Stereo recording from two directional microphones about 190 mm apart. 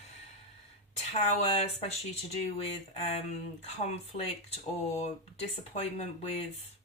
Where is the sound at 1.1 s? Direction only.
35° left (ahead or behind).